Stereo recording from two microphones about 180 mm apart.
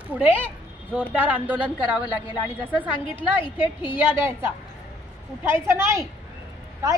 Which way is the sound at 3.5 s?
10° right (ahead or behind).